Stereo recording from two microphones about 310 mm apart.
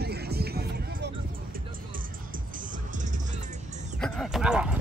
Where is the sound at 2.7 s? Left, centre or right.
Right.